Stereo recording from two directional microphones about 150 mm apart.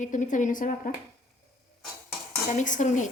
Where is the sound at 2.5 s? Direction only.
55° left (ahead or behind).